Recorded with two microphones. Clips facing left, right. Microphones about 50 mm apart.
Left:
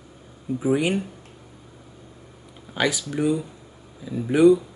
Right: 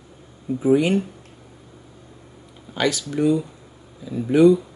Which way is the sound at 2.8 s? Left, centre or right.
Centre.